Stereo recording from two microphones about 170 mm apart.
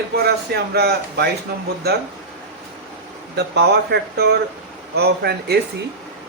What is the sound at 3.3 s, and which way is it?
Speech, 75° right (ahead or behind).